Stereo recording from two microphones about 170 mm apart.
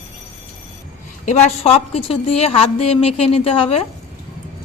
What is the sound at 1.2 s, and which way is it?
A woman's voice, 40° left (ahead or behind).